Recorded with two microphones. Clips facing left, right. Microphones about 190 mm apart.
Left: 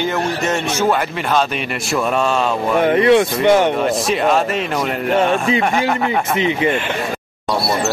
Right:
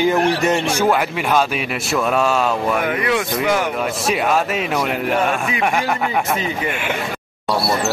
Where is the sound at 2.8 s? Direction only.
30° left (ahead or behind).